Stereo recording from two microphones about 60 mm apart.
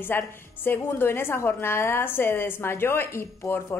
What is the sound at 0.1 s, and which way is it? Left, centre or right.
A woman's voice, left.